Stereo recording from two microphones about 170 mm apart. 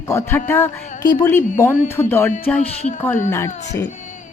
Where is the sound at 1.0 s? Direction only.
25° left (ahead or behind).